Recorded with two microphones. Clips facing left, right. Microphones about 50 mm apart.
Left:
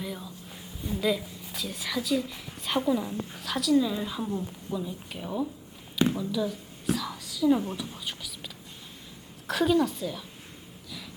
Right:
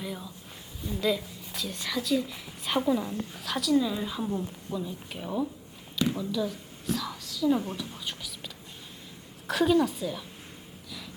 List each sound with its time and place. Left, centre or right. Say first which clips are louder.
0.0 s a woman's voice: left 1 dB; centre
6.9 s whispering: left 1 dB; centre
7.7 s a woman's voice: even; centre
9.5 s a woman's voice: even; centre